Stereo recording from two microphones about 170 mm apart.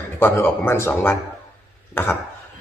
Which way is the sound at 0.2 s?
15° left (ahead or behind).